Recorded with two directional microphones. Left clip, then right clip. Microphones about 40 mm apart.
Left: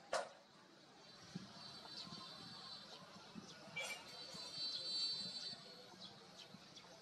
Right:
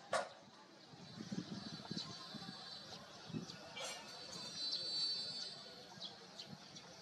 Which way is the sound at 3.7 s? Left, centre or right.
Centre.